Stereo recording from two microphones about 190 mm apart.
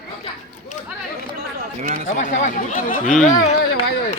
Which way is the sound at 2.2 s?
40° left (ahead or behind).